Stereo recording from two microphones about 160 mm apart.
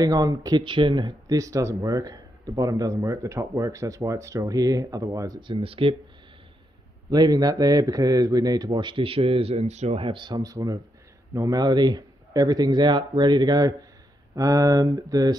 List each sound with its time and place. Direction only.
0.0 s speech: 20° right (ahead or behind)
5.6 s speech: 35° right (ahead or behind)
7.1 s speech: 25° right (ahead or behind)